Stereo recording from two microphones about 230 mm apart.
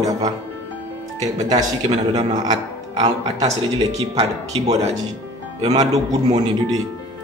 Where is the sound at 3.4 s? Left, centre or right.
Right.